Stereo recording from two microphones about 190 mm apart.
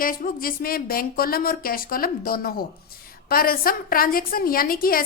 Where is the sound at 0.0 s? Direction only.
50° left (ahead or behind).